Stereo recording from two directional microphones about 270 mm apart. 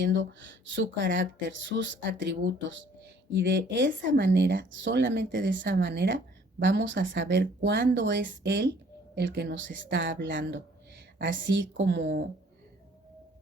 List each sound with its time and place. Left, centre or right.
0.0 s speech: right